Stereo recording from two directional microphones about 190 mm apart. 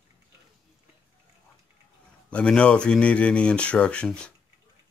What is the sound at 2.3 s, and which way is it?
Speech, 5° left (ahead or behind).